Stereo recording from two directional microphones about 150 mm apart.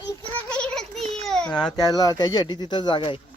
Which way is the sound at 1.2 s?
5° left (ahead or behind).